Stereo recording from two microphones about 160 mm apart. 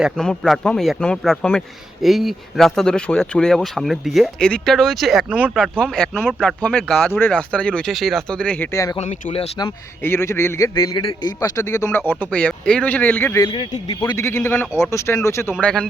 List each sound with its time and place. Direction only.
0.0 s speech: centre (ahead or behind)
5.5 s speech: 5° left (ahead or behind)
9.0 s speech: 45° left (ahead or behind)
10.0 s a man's voice: 15° left (ahead or behind)
13.5 s speech: 35° left (ahead or behind)
14.0 s speech: 20° left (ahead or behind)
15.6 s speech: 5° left (ahead or behind)